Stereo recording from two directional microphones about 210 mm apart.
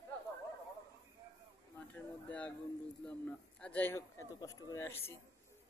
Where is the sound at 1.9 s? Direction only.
5° left (ahead or behind).